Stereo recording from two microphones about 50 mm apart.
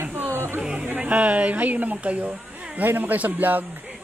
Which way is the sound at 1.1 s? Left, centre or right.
Right.